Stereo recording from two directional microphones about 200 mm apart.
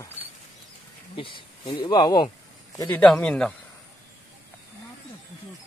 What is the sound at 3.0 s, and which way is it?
Speech, 5° left (ahead or behind).